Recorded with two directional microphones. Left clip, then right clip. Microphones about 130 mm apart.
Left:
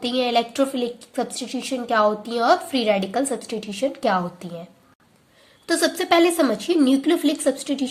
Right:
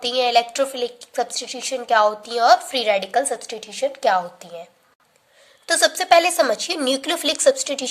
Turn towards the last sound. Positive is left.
turn(degrees=-45)  # may be behind; listen again after turning